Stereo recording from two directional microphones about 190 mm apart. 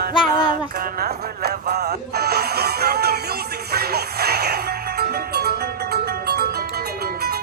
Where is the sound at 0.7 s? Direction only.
55° right (ahead or behind).